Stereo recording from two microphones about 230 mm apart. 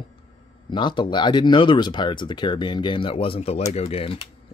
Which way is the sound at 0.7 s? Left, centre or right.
Centre.